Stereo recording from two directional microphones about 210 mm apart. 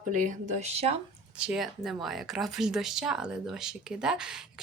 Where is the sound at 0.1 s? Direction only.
35° right (ahead or behind).